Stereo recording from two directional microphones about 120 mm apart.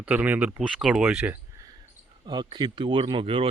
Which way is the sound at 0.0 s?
10° right (ahead or behind).